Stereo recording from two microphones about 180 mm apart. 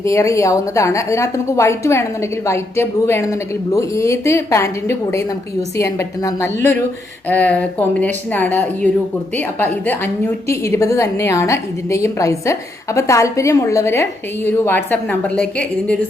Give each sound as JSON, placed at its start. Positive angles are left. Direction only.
{"t": 0.0, "sound": "a woman's voice", "side_deg": 15}